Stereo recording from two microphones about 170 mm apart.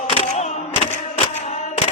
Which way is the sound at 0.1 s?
35° left (ahead or behind).